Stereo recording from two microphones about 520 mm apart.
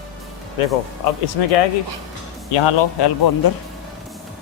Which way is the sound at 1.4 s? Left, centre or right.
Left.